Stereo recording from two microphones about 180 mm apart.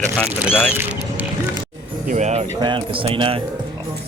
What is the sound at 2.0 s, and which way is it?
Speech, 40° right (ahead or behind).